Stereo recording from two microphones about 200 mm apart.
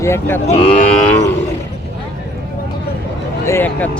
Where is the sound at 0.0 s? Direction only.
10° left (ahead or behind).